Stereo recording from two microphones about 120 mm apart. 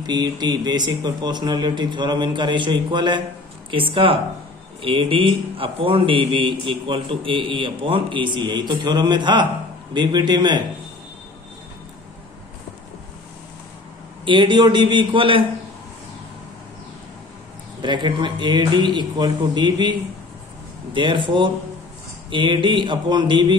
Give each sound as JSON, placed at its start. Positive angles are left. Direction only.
{"t": 0.0, "sound": "a man's voice", "side_deg": -35}
{"t": 14.2, "sound": "speech", "side_deg": -40}
{"t": 17.8, "sound": "a man's voice", "side_deg": -40}